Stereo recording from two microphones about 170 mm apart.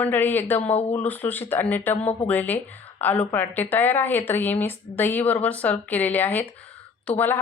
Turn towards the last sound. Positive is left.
turn(degrees=10)  # may be behind; listen again after turning